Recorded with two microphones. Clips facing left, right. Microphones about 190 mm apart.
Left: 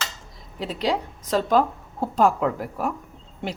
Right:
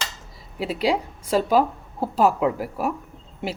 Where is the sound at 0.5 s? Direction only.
10° right (ahead or behind).